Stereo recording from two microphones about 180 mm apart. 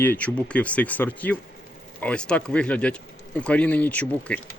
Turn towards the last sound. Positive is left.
turn(degrees=10)  # may be behind; listen again after turning